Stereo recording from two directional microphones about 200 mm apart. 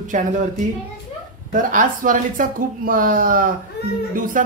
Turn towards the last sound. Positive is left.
turn(degrees=-45)  # may be behind; listen again after turning